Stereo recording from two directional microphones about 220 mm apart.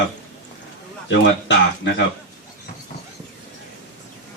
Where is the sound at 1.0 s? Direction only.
55° left (ahead or behind).